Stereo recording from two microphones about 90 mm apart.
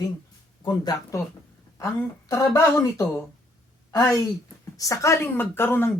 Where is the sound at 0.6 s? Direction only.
50° left (ahead or behind).